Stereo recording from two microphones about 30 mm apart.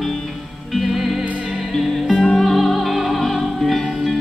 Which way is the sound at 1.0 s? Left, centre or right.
Centre.